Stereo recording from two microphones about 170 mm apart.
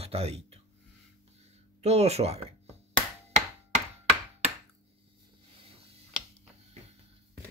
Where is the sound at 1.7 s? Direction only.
40° right (ahead or behind).